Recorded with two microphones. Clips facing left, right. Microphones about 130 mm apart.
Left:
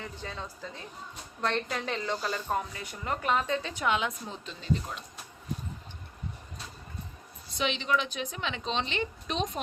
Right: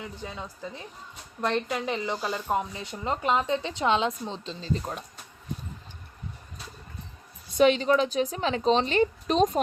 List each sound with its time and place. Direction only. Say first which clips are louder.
0.0 s a woman's voice: right 2 dB; 10° right (ahead or behind); by 4.9 s 30° right (ahead or behind)
7.5 s a woman's voice: right 9 dB; 45° right (ahead or behind)